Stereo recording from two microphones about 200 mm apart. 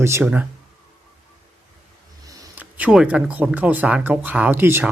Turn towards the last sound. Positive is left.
turn(degrees=-10)  # may be behind; listen again after turning